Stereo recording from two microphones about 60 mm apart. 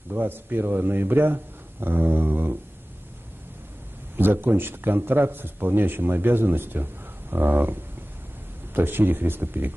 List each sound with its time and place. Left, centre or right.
0.1 s speech: right
4.2 s speech: right